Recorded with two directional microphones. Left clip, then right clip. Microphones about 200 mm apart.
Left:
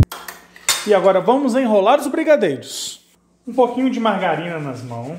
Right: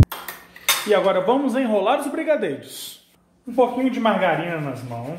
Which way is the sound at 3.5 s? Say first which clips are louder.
Left 3 dB; 35° left (ahead or behind).